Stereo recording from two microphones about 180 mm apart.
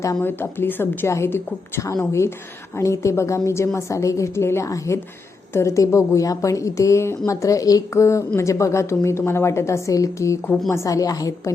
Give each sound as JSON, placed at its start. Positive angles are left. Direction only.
{"t": 0.0, "sound": "a woman's voice", "side_deg": 15}
{"t": 10.8, "sound": "a woman's voice", "side_deg": 20}